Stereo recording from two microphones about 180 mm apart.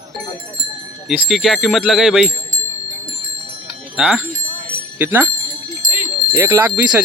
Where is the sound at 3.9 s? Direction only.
5° right (ahead or behind).